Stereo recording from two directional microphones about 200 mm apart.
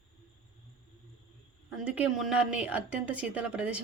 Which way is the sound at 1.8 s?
5° right (ahead or behind).